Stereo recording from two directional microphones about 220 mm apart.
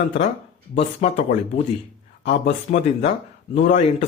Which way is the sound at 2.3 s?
30° left (ahead or behind).